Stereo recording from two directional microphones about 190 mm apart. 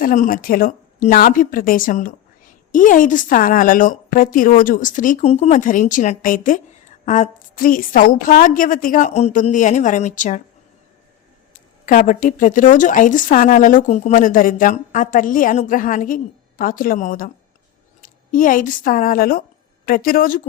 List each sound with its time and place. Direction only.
0.0 s speech: 45° left (ahead or behind)
11.9 s speech: 45° left (ahead or behind)